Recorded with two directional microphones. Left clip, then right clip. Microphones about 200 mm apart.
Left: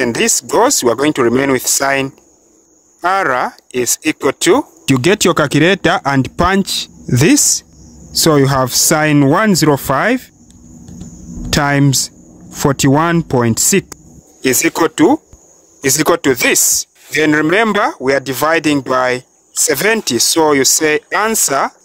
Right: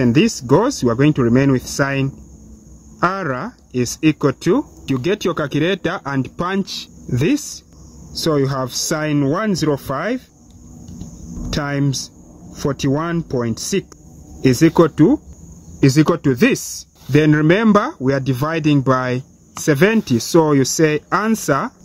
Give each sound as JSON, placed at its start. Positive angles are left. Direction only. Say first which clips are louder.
{"t": 0.0, "sound": "speech", "louder": "left 2 dB", "side_deg": 55}
{"t": 7.1, "sound": "speech", "louder": "left 8 dB", "side_deg": 45}
{"t": 11.5, "sound": "speech", "louder": "left 9 dB", "side_deg": 45}